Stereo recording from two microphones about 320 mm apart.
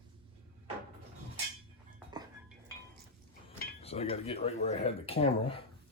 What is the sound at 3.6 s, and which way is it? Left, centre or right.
Speech, centre.